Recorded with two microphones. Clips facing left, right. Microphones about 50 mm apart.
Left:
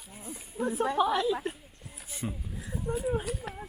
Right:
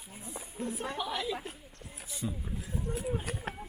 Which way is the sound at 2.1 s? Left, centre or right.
Left.